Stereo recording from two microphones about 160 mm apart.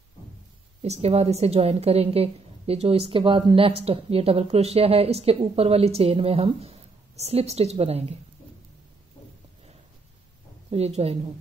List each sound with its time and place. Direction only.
0.8 s a woman's voice: 40° right (ahead or behind)
10.7 s a woman's voice: 40° right (ahead or behind)